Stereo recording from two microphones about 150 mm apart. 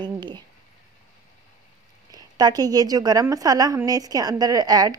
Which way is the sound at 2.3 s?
25° right (ahead or behind).